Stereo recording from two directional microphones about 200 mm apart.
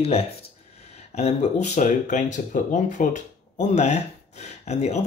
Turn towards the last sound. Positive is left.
turn(degrees=35)  # may be behind; listen again after turning